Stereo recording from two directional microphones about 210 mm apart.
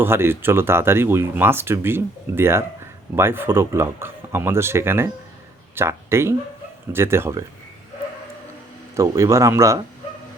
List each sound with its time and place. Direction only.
0.0 s speech: 10° right (ahead or behind)
9.0 s speech: 15° right (ahead or behind)